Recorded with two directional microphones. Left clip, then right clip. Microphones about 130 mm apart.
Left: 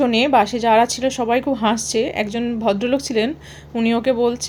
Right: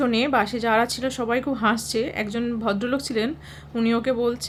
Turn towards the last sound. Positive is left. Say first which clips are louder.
# left 5 dB
turn(degrees=25)  # may be behind; listen again after turning